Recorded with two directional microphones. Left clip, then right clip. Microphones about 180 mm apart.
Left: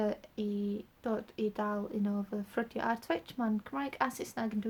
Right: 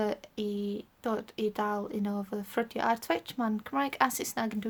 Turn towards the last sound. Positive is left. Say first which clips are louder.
# right 4 dB
turn(degrees=-40)  # may be behind; listen again after turning